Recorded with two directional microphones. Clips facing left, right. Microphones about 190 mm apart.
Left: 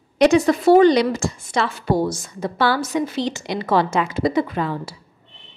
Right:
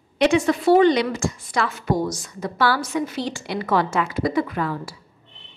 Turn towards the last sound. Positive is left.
turn(degrees=25)  # may be behind; listen again after turning